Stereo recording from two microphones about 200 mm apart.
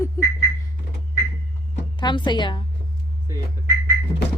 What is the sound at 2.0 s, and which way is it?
Speech, 20° left (ahead or behind).